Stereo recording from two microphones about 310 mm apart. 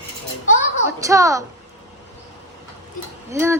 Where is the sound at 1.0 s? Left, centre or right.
Centre.